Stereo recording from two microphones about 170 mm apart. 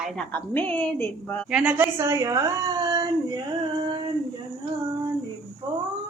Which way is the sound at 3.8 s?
25° right (ahead or behind).